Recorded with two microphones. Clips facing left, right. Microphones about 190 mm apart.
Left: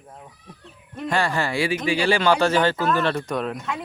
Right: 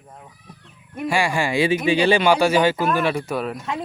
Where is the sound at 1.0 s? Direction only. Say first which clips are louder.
Right 2 dB; 10° right (ahead or behind).